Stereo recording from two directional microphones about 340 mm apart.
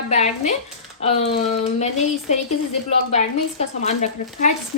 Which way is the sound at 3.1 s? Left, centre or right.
Centre.